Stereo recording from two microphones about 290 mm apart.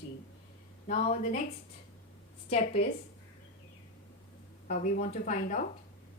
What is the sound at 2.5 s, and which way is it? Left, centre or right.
Speech, left.